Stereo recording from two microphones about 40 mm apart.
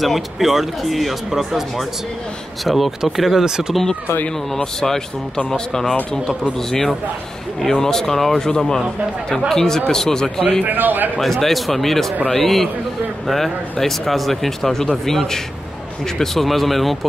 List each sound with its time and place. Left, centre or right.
0.0 s speech: centre
4.7 s speech: centre
10.6 s a man's voice: right
11.1 s speech: centre